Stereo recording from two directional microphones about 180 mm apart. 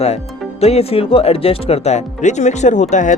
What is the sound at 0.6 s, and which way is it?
Speech, 35° left (ahead or behind).